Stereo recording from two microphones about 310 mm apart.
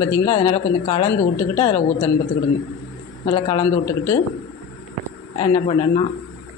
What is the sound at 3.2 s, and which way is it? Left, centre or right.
Speech, centre.